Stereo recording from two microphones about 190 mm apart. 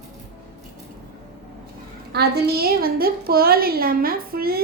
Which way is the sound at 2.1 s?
55° right (ahead or behind).